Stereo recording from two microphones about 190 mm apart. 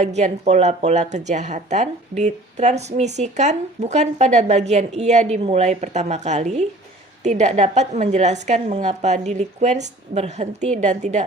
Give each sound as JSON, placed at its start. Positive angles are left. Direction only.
{"t": 0.0, "sound": "speech", "side_deg": -35}